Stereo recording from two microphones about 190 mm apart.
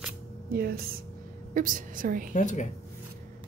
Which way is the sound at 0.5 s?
55° right (ahead or behind).